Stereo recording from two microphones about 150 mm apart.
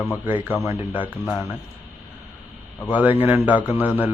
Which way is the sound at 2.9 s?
10° right (ahead or behind).